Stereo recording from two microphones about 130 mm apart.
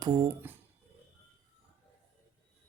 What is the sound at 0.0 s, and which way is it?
Speech, 30° right (ahead or behind).